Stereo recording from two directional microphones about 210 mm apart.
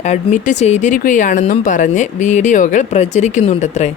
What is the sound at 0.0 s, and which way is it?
Speech, 35° left (ahead or behind).